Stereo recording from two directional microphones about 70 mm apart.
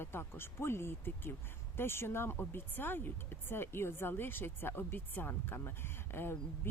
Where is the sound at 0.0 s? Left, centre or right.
Left.